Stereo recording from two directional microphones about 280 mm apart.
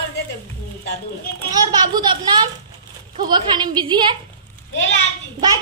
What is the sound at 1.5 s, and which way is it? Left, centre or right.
A child's voice, centre.